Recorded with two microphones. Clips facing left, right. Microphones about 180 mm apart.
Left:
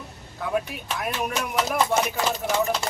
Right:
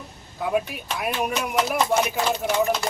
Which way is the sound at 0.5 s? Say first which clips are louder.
Right 1 dB; 5° right (ahead or behind).